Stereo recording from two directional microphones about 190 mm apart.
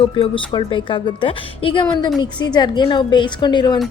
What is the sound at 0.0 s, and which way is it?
A woman's voice, 25° left (ahead or behind).